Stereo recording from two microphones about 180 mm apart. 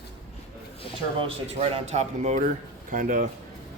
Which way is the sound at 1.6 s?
35° right (ahead or behind).